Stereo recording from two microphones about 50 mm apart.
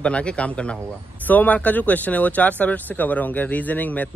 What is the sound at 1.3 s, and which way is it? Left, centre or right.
Speech, left.